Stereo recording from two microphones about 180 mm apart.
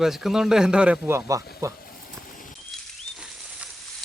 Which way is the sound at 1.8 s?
55° left (ahead or behind).